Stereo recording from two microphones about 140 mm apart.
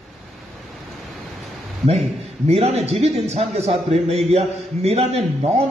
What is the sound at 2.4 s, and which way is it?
A man's voice, 45° right (ahead or behind).